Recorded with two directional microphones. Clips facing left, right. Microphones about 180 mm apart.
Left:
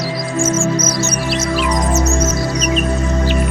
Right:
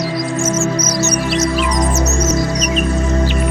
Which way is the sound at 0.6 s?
30° left (ahead or behind).